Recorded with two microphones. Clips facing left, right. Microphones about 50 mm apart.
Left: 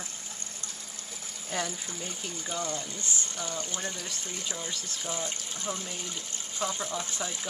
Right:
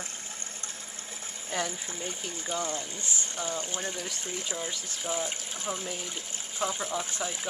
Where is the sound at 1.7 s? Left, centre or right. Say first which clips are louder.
Right 1 dB; right.